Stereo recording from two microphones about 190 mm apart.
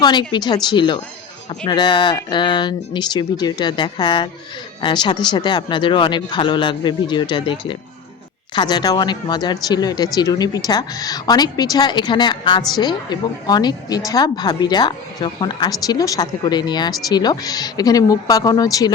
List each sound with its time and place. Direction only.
0.0 s speech: 20° left (ahead or behind)